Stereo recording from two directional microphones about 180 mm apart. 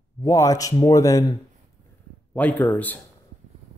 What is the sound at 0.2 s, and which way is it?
Speech, 20° left (ahead or behind).